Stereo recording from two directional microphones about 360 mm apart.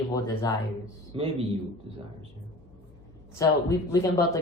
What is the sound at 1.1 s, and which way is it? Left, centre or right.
Speech, centre.